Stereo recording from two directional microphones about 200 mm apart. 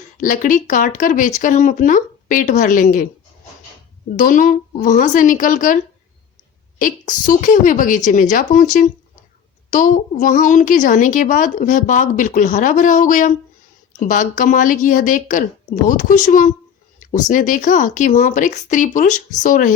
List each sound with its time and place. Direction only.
0.2 s a woman's voice: 40° left (ahead or behind)
4.2 s a woman's voice: 40° left (ahead or behind)